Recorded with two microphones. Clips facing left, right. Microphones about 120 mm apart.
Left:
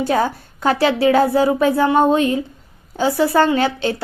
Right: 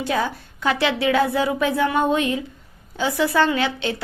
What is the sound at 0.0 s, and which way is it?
A woman's voice, 40° left (ahead or behind).